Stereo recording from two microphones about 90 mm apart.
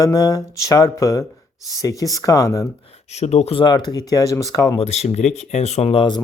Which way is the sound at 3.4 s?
65° left (ahead or behind).